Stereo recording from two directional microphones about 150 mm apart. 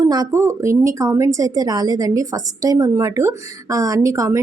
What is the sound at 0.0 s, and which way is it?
A woman's voice, 25° right (ahead or behind).